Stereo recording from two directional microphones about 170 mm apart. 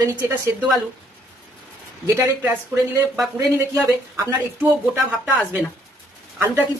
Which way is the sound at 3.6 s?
15° right (ahead or behind).